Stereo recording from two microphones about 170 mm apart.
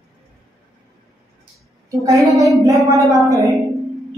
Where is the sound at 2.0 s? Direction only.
20° right (ahead or behind).